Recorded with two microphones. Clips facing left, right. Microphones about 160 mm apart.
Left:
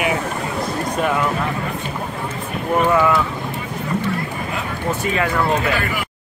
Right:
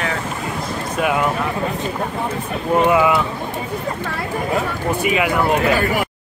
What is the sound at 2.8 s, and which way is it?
Speech, 15° right (ahead or behind).